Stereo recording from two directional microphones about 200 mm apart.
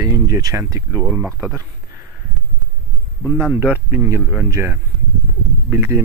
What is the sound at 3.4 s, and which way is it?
Speech, 10° right (ahead or behind).